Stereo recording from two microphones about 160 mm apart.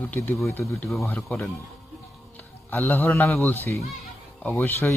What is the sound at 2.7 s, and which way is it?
Speech, 15° left (ahead or behind).